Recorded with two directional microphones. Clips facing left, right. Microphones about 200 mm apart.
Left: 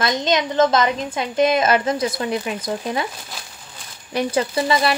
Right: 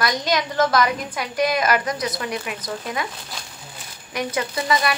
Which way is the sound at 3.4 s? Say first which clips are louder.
Even; 5° left (ahead or behind).